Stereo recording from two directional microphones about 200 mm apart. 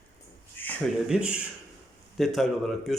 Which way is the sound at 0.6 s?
10° left (ahead or behind).